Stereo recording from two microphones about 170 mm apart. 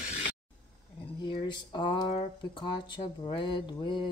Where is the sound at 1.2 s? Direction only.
30° left (ahead or behind).